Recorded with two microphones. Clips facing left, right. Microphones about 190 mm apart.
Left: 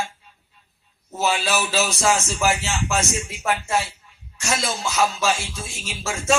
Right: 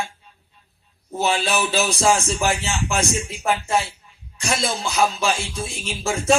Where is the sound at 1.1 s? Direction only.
30° right (ahead or behind).